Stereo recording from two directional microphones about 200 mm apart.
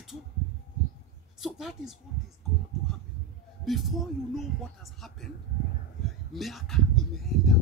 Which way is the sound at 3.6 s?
Centre (ahead or behind).